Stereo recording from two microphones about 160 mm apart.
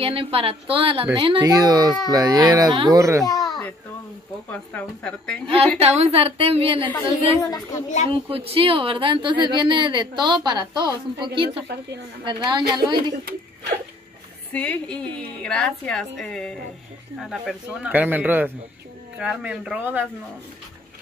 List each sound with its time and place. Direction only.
0.0 s speech: 35° right (ahead or behind); by 3.3 s 20° right (ahead or behind)
4.5 s speech: 10° left (ahead or behind)
5.8 s speech: 40° right (ahead or behind)
7.1 s a woman's voice: 20° left (ahead or behind)
8.1 s speech: 35° right (ahead or behind)
11.6 s speech: 90° right
12.3 s speech: 30° right (ahead or behind)
14.5 s a woman's voice: 10° left (ahead or behind); by 20.1 s 10° right (ahead or behind)